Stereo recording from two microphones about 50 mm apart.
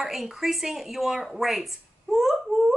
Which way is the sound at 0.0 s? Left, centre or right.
Centre.